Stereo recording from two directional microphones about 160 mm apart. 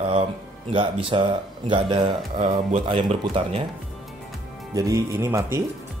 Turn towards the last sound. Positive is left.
turn(degrees=-20)  # may be behind; listen again after turning